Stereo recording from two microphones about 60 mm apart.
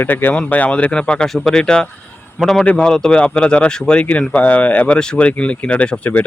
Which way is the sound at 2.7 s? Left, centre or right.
Centre.